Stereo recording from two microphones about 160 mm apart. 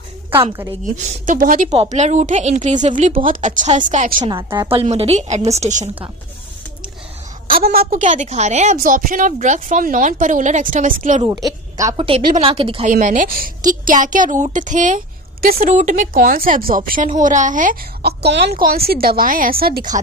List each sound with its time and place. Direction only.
0.9 s a woman's voice: 55° right (ahead or behind)
1.7 s a woman's voice: 40° right (ahead or behind)
4.5 s speech: 30° right (ahead or behind)
7.6 s a woman's voice: 70° right (ahead or behind); by 11.2 s 55° right (ahead or behind)
11.4 s speech: 20° right (ahead or behind)
11.9 s speech: 35° right (ahead or behind)
12.8 s a woman's voice: 50° right (ahead or behind)
18.0 s a woman's voice: 90° right
18.6 s a woman's voice: 70° right (ahead or behind)